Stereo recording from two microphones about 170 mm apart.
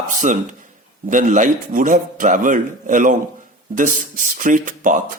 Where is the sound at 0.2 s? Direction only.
45° right (ahead or behind).